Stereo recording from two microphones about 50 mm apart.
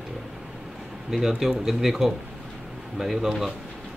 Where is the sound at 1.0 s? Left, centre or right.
Centre.